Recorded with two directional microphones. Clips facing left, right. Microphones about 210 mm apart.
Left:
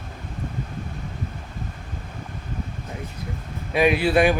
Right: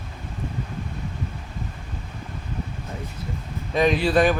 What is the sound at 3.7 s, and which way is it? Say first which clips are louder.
Speech: left 1 dB; 10° left (ahead or behind).